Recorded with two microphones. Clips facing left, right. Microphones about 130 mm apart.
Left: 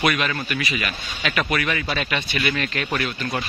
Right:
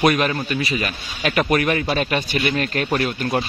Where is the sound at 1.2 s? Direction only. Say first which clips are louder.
Right 5 dB; 45° right (ahead or behind).